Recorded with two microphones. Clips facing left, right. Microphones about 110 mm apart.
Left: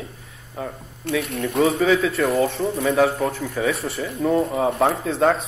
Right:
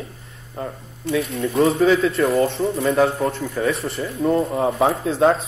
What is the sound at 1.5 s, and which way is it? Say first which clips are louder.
Speech: right 2 dB; centre (ahead or behind).